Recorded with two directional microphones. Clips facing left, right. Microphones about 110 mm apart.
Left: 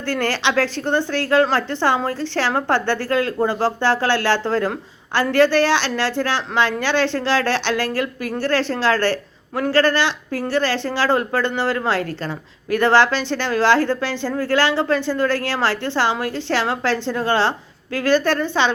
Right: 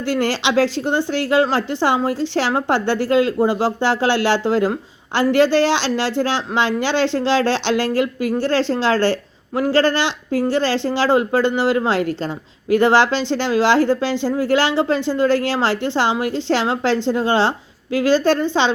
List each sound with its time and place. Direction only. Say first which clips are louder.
0.1 s speech: right 2 dB; 15° right (ahead or behind)